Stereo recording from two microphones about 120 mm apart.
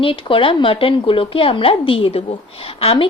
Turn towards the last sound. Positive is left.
turn(degrees=50)  # may be behind; listen again after turning